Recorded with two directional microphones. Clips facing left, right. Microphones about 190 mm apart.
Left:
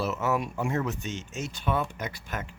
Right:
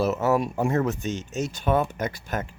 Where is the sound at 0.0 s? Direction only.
40° right (ahead or behind).